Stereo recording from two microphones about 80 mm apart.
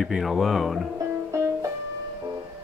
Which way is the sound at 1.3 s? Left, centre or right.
Right.